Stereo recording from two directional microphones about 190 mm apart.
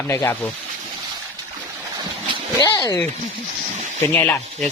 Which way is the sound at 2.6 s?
20° left (ahead or behind).